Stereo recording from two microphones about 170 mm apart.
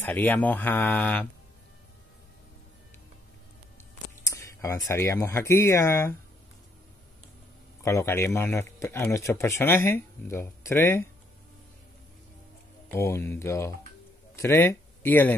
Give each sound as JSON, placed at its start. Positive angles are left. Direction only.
{"t": 0.0, "sound": "speech", "side_deg": 10}
{"t": 4.2, "sound": "speech", "side_deg": 20}
{"t": 7.8, "sound": "speech", "side_deg": 15}
{"t": 12.9, "sound": "speech", "side_deg": 15}